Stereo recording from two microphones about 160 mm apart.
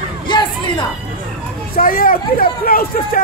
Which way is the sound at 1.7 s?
65° left (ahead or behind).